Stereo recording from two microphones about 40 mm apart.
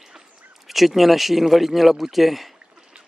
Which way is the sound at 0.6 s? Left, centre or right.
Centre.